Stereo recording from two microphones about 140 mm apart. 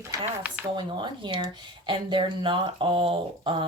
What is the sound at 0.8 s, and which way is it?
Speech, 35° right (ahead or behind).